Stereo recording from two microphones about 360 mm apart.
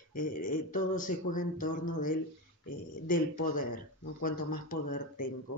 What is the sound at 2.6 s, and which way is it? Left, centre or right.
Speech, left.